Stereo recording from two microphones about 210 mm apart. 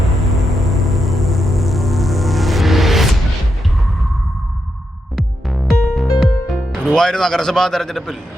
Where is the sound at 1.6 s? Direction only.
Centre (ahead or behind).